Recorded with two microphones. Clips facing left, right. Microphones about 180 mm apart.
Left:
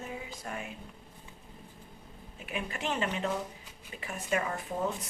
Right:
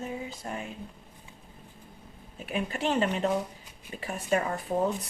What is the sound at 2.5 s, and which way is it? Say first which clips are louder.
A woman's voice: right 6 dB; 35° right (ahead or behind).